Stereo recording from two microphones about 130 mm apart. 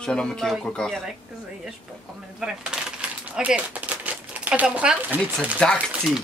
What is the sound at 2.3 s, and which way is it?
Speech, 5° right (ahead or behind).